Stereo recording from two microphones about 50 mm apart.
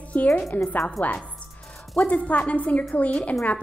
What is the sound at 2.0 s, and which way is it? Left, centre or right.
Speech, left.